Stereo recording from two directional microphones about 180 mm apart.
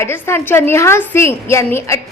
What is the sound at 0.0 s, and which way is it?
A woman's voice, 15° left (ahead or behind).